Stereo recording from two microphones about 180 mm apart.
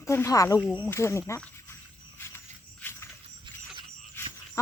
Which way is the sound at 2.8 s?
10° left (ahead or behind).